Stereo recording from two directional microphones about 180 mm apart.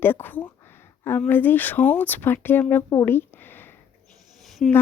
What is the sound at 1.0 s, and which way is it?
A woman's voice, 10° left (ahead or behind).